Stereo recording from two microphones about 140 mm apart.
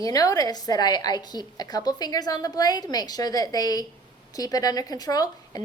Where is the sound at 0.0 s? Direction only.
25° left (ahead or behind).